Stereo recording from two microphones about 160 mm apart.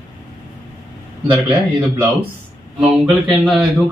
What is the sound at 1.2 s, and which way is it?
Speech, 30° right (ahead or behind).